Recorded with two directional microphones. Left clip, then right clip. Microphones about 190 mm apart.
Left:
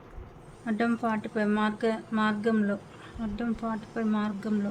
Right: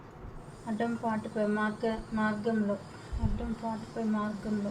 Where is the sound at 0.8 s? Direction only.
40° left (ahead or behind).